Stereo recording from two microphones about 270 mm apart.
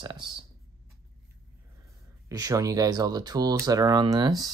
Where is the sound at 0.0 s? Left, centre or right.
Centre.